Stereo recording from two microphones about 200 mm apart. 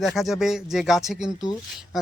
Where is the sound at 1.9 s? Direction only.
Centre (ahead or behind).